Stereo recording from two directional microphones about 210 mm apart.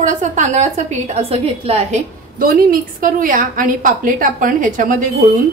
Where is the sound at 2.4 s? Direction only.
40° right (ahead or behind).